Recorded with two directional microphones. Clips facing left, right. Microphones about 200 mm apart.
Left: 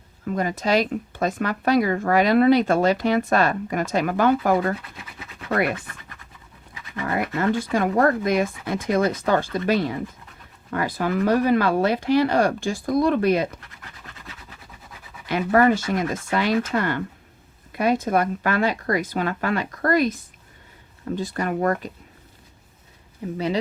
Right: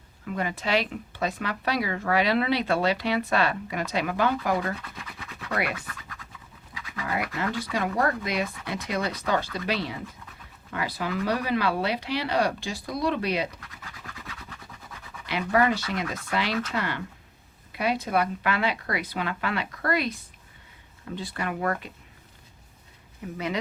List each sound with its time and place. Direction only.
0.3 s speech: 40° left (ahead or behind)
7.0 s speech: 50° left (ahead or behind)
15.3 s speech: 45° left (ahead or behind)
23.2 s speech: 30° left (ahead or behind)